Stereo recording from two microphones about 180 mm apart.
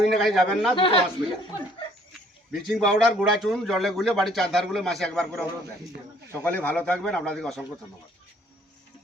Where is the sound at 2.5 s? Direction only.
Centre (ahead or behind).